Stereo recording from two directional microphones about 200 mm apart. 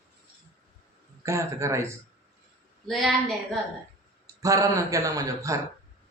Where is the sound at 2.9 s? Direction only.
Centre (ahead or behind).